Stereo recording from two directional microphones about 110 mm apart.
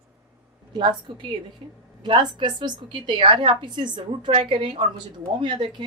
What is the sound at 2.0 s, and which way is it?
A woman's voice, 45° right (ahead or behind).